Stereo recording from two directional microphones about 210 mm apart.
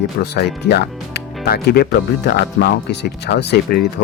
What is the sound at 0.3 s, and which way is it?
Speech, 50° left (ahead or behind).